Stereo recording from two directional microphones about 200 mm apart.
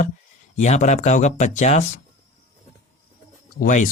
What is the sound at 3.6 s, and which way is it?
Speech, 40° left (ahead or behind).